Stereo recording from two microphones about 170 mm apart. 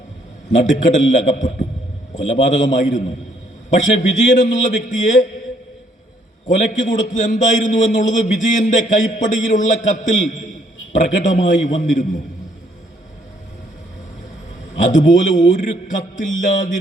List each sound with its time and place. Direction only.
0.6 s a man's voice: 50° left (ahead or behind)
6.6 s a man's voice: 50° left (ahead or behind)
14.8 s a man's voice: 50° left (ahead or behind)